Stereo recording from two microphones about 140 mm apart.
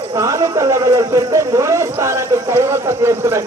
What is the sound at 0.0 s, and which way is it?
Speech, 20° right (ahead or behind).